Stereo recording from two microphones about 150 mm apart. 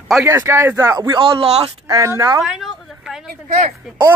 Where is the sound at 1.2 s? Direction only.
35° right (ahead or behind).